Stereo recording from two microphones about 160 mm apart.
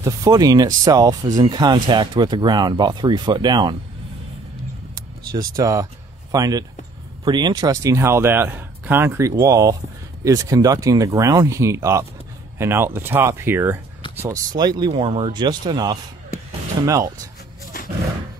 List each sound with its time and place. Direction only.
0.0 s speech: 20° right (ahead or behind)
5.6 s speech: 20° right (ahead or behind)
14.6 s speech: 25° right (ahead or behind)